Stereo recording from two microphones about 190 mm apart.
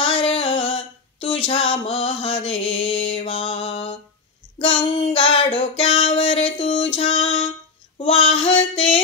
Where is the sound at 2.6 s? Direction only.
75° left (ahead or behind).